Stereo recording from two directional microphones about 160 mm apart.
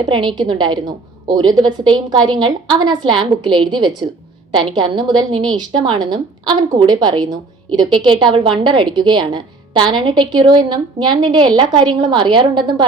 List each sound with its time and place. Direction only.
0.1 s a woman's voice: 30° right (ahead or behind)